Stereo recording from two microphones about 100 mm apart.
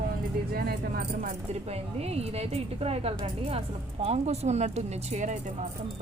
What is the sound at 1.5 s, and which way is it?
A woman's voice, 90° right.